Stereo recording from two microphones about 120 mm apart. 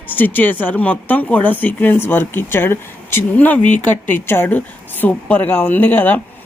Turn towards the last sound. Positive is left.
turn(degrees=15)  # may be behind; listen again after turning